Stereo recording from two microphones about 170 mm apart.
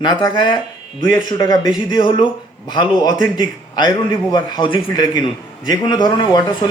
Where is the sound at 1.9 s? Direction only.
25° left (ahead or behind).